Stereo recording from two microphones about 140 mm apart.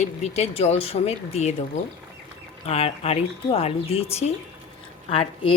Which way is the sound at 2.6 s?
45° left (ahead or behind).